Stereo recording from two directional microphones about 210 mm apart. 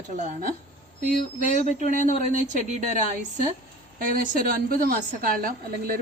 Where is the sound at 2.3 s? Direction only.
35° right (ahead or behind).